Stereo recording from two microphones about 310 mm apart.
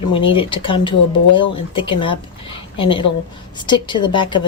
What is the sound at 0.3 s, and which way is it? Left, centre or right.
Speech, centre.